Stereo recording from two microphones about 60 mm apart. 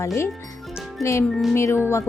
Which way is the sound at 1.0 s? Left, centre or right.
Left.